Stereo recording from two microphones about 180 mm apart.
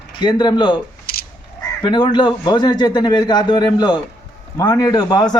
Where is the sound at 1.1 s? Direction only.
55° left (ahead or behind).